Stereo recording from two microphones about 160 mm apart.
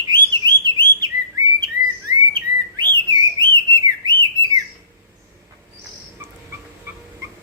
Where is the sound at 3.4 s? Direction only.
30° right (ahead or behind).